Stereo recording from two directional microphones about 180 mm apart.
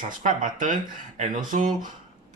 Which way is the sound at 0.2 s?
45° right (ahead or behind).